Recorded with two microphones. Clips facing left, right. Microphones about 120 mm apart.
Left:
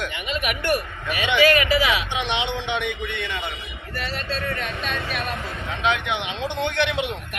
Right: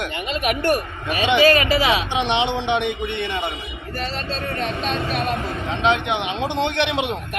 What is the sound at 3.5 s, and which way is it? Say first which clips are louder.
A man's voice: right 3 dB; 35° right (ahead or behind).